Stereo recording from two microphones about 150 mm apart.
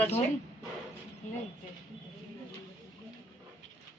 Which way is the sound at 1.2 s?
55° left (ahead or behind).